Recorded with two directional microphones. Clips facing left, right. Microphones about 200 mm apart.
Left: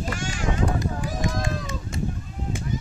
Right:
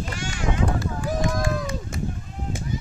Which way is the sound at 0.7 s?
20° left (ahead or behind).